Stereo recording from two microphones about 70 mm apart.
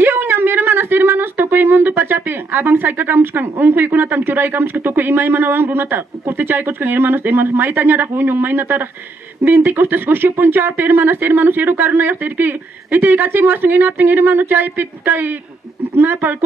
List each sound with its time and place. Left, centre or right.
0.0 s speech: right